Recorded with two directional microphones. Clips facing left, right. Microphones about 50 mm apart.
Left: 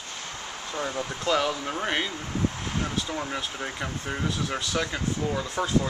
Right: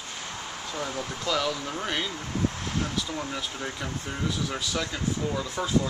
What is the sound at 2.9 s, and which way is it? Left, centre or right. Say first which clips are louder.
Speech: left 1 dB; centre.